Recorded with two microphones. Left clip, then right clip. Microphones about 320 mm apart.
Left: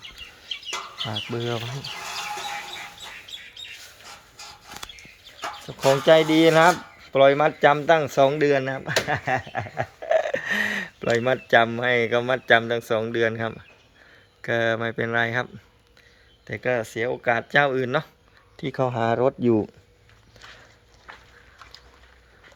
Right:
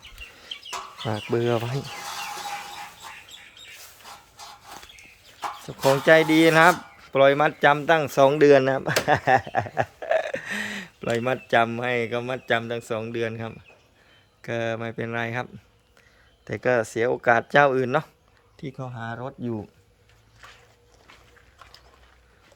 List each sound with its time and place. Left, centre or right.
1.0 s speech: centre
5.6 s speech: centre
16.5 s speech: centre
18.7 s speech: left